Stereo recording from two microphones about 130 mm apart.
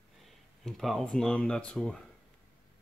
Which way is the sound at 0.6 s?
Centre (ahead or behind).